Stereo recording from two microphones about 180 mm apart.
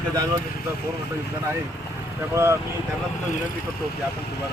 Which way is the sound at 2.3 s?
15° right (ahead or behind).